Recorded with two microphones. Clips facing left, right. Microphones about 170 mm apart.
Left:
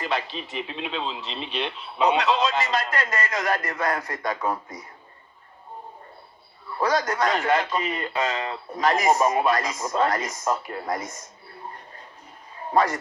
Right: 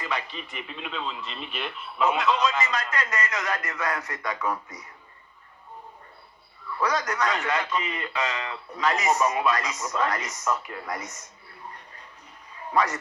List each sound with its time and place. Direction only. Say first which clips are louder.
0.0 s radio: left 4 dB; 30° left (ahead or behind)
0.5 s a man's voice: left 8 dB; 30° left (ahead or behind)
1.5 s speech: left 5 dB; 80° left
2.3 s a man's voice: left 2 dB; 30° left (ahead or behind)
6.7 s a man's voice: left 3 dB; 30° left (ahead or behind)
12.5 s a sound: left 3 dB; 30° left (ahead or behind)